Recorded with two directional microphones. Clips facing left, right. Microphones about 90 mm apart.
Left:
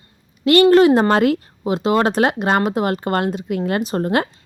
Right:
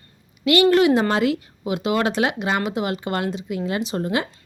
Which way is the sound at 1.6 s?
35° left (ahead or behind).